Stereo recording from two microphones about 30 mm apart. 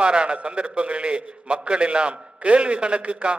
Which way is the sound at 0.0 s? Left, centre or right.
Right.